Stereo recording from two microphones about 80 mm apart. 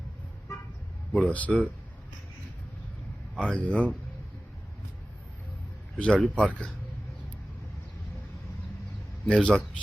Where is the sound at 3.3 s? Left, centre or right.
Centre.